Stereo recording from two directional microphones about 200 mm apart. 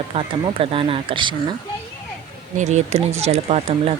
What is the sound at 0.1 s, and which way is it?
Speech, 25° right (ahead or behind).